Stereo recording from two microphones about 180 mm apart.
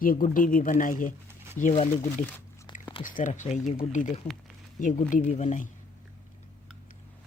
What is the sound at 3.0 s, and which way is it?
Speech, 45° left (ahead or behind).